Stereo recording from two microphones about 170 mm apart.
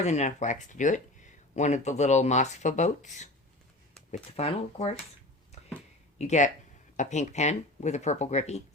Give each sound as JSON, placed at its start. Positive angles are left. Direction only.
{"t": 0.0, "sound": "speech", "side_deg": 40}
{"t": 6.1, "sound": "speech", "side_deg": 45}